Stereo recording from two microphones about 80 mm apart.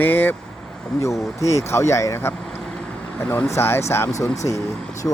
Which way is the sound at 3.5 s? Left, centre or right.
Left.